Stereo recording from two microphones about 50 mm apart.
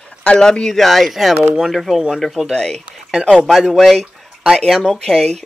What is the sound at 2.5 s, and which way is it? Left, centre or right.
Speech, centre.